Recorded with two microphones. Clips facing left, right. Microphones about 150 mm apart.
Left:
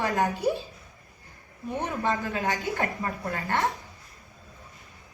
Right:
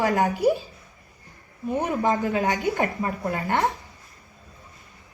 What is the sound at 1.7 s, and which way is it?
Speech, 45° right (ahead or behind).